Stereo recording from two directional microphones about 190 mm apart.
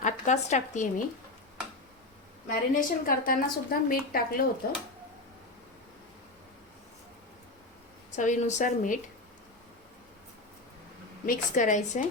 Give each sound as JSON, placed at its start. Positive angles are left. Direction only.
{"t": 0.0, "sound": "speech", "side_deg": 40}
{"t": 2.5, "sound": "a woman's voice", "side_deg": 45}
{"t": 8.1, "sound": "a woman's voice", "side_deg": 40}
{"t": 11.3, "sound": "a woman's voice", "side_deg": 40}